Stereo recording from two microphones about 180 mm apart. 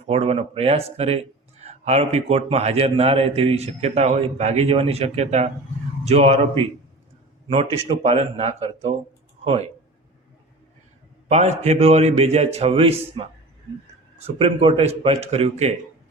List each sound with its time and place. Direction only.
0.0 s speech: 35° right (ahead or behind)
11.3 s speech: 40° right (ahead or behind)
14.3 s speech: 30° right (ahead or behind)